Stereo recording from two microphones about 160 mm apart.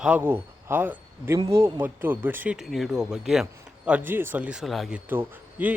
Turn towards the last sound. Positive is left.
turn(degrees=-10)  # may be behind; listen again after turning